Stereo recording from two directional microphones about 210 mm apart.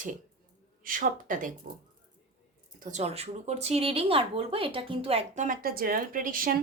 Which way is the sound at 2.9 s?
30° right (ahead or behind).